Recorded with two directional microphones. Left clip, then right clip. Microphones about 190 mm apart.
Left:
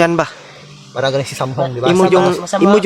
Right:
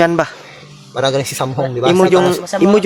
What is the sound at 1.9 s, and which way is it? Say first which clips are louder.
Speech: even; 15° right (ahead or behind).